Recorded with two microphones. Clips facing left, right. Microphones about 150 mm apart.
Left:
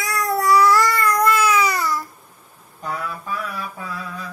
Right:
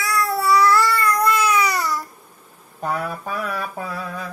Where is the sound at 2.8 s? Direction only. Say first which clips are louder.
Right 3 dB; 60° right (ahead or behind).